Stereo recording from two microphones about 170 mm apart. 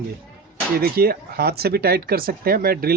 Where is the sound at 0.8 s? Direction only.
65° right (ahead or behind).